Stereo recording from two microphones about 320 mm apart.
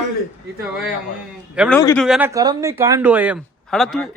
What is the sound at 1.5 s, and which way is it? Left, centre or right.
Speech, centre.